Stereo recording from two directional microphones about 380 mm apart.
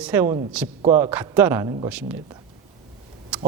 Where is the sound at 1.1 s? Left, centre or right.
Centre.